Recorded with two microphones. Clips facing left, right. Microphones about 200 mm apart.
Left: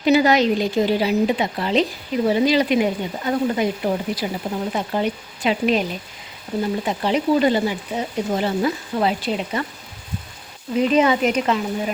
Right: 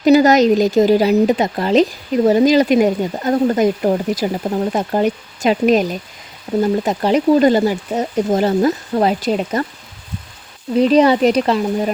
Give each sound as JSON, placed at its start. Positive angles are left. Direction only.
{"t": 0.0, "sound": "speech", "side_deg": -40}
{"t": 6.8, "sound": "speech", "side_deg": -45}
{"t": 10.8, "sound": "speech", "side_deg": -35}